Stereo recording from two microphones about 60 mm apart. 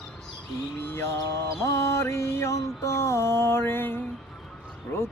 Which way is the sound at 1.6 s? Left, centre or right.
Left.